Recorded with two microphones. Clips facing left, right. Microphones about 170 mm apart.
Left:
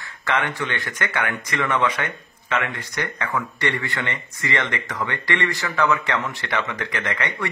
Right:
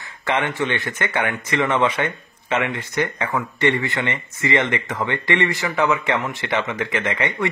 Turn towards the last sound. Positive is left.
turn(degrees=-20)  # may be behind; listen again after turning